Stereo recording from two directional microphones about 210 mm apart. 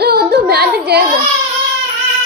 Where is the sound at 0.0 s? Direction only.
45° right (ahead or behind).